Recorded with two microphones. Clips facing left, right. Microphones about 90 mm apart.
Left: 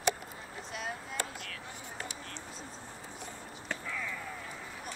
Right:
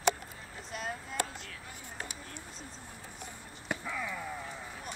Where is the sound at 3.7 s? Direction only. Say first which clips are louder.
Right 2 dB; 15° right (ahead or behind).